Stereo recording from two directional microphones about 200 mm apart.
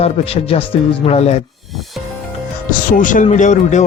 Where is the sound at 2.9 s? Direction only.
40° left (ahead or behind).